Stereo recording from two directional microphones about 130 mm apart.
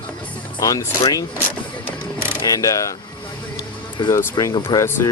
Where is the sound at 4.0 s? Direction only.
35° left (ahead or behind).